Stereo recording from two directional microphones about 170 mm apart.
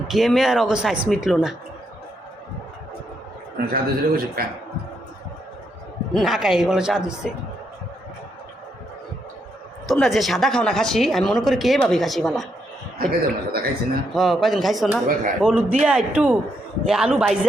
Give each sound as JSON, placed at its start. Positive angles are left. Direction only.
{"t": 0.1, "sound": "a woman's voice", "side_deg": 0}
{"t": 3.7, "sound": "a man's voice", "side_deg": -60}
{"t": 6.1, "sound": "a woman's voice", "side_deg": 0}
{"t": 9.8, "sound": "a woman's voice", "side_deg": 0}
{"t": 13.0, "sound": "a man's voice", "side_deg": -65}
{"t": 14.1, "sound": "a woman's voice", "side_deg": 0}